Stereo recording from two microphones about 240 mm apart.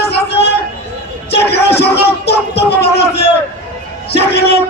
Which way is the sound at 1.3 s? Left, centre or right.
Left.